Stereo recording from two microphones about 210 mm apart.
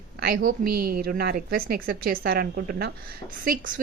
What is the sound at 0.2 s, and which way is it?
A woman's voice, 45° right (ahead or behind).